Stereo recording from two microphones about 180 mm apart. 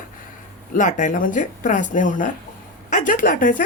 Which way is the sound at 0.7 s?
45° left (ahead or behind).